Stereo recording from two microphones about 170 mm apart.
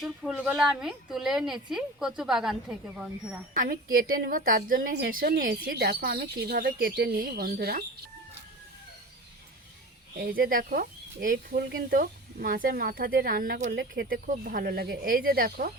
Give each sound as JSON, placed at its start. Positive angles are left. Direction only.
{"t": 0.0, "sound": "a woman's voice", "side_deg": -5}
{"t": 3.5, "sound": "a woman's voice", "side_deg": -55}
{"t": 10.2, "sound": "a woman's voice", "side_deg": -65}
{"t": 14.3, "sound": "a woman's voice", "side_deg": -55}